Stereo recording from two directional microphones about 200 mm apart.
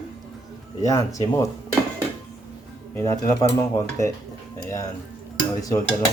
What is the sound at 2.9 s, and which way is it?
Speech, 15° left (ahead or behind).